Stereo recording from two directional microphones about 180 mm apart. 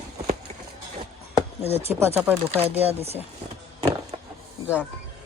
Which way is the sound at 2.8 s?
35° right (ahead or behind).